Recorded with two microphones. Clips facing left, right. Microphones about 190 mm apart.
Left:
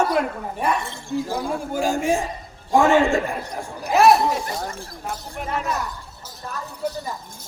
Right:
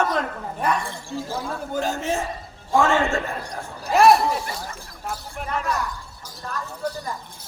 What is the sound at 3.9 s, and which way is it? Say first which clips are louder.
Speech: even; centre (ahead or behind).